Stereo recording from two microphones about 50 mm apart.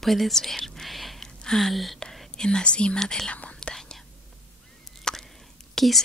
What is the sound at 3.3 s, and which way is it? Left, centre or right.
Speech, left.